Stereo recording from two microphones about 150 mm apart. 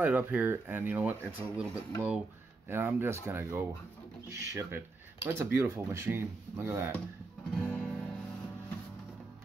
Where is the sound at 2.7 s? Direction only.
15° right (ahead or behind).